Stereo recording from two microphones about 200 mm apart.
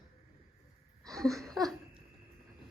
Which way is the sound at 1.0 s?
Centre (ahead or behind).